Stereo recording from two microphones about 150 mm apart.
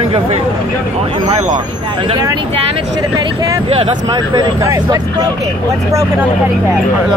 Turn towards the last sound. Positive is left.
turn(degrees=-20)  # may be behind; listen again after turning